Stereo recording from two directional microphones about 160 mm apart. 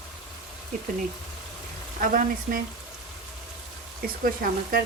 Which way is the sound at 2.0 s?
60° right (ahead or behind).